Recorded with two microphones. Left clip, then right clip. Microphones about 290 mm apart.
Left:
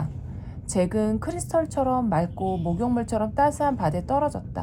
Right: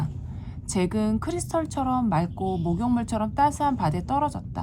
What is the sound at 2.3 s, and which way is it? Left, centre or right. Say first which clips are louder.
Speech: left 1 dB; right.